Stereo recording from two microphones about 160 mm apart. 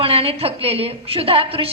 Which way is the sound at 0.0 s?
35° right (ahead or behind).